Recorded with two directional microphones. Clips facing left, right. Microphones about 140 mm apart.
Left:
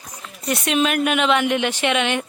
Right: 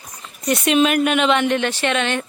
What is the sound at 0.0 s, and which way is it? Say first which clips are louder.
Speech: right 3 dB; centre (ahead or behind).